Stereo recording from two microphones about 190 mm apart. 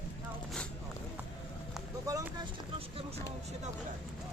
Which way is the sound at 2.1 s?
15° right (ahead or behind).